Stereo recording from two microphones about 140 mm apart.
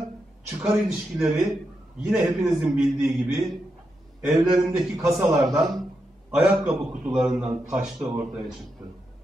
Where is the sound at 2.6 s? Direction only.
5° right (ahead or behind).